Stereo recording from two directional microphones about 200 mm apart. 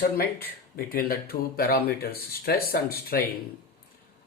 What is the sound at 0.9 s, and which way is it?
Speech, 50° left (ahead or behind).